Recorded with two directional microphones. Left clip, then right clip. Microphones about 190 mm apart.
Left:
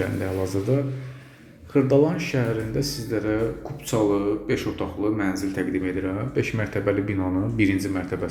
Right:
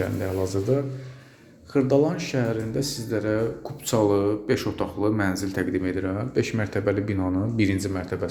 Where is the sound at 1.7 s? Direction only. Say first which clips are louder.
Left 2 dB; 10° right (ahead or behind).